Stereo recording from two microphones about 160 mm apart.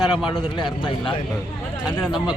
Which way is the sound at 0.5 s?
25° left (ahead or behind).